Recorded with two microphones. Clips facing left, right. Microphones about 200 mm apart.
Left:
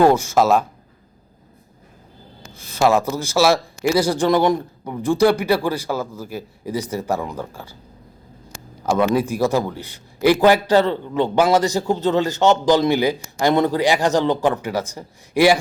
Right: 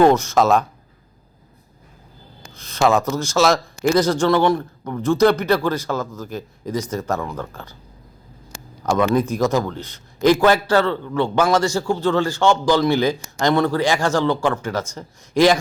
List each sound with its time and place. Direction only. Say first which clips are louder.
0.0 s a man's voice: even; 10° left (ahead or behind)
2.6 s a sound: left 1 dB; 10° left (ahead or behind)
3.1 s a man's voice: even; 10° left (ahead or behind)
8.9 s a man's voice: even; 10° left (ahead or behind)